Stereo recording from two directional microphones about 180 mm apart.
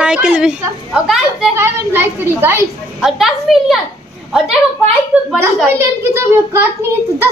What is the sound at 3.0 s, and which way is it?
Speech, centre (ahead or behind).